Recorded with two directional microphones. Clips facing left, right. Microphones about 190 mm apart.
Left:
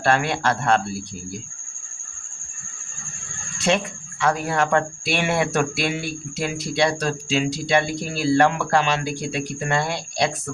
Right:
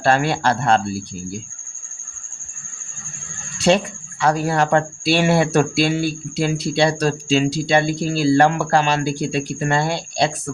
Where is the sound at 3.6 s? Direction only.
35° right (ahead or behind).